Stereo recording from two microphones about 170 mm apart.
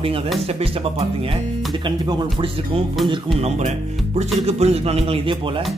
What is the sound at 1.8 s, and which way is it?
Speech, 25° right (ahead or behind).